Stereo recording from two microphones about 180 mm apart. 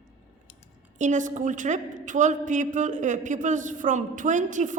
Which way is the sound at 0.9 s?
45° right (ahead or behind).